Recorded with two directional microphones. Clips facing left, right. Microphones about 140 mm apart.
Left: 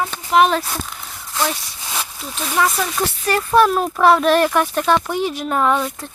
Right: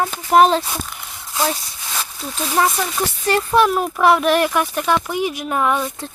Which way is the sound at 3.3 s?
20° right (ahead or behind).